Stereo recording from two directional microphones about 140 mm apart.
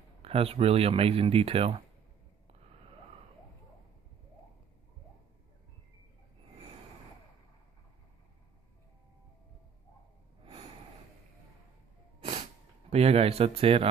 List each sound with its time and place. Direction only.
0.2 s speech: 45° right (ahead or behind)
12.9 s speech: 45° right (ahead or behind)